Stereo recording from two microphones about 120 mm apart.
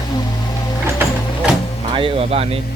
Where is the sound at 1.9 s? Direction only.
50° right (ahead or behind).